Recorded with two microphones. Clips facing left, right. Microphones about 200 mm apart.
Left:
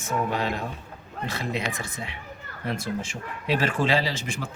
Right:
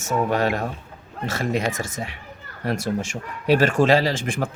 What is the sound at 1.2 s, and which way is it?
Speech, 45° right (ahead or behind).